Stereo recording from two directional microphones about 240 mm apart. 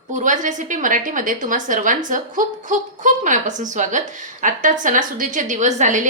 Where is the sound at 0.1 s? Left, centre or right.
Right.